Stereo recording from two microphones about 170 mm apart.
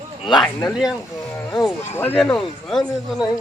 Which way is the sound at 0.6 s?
5° right (ahead or behind).